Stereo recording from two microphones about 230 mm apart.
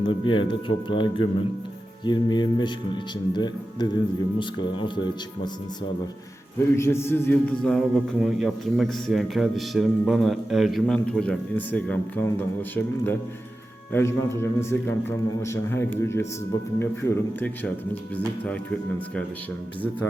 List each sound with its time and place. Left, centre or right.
0.0 s speech: left
6.7 s a man's voice: centre